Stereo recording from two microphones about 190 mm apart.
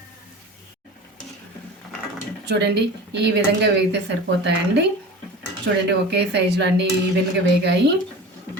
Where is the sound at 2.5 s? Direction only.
60° right (ahead or behind).